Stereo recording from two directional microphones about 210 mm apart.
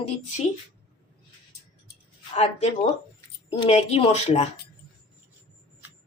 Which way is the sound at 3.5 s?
30° left (ahead or behind).